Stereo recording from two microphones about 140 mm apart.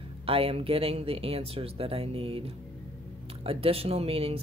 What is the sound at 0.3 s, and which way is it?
Speech, 45° right (ahead or behind).